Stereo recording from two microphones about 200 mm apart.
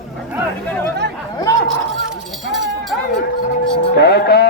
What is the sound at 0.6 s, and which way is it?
Speech, 10° left (ahead or behind).